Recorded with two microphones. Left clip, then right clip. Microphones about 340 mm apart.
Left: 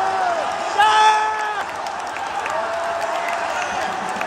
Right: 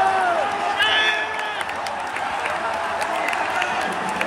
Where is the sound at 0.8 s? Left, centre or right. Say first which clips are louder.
Left 6 dB; centre.